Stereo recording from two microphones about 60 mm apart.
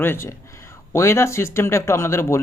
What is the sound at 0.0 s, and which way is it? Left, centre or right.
Speech, left.